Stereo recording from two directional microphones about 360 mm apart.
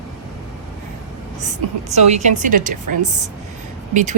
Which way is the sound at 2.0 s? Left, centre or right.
Centre.